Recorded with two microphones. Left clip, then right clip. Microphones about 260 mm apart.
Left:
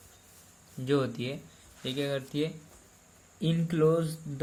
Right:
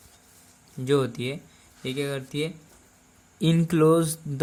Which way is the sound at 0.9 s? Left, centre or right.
Right.